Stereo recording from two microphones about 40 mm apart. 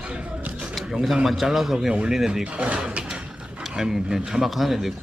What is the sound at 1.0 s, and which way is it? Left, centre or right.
Speech, centre.